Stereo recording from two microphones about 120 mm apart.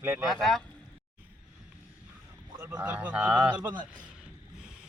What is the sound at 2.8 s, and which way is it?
Speech, 15° right (ahead or behind).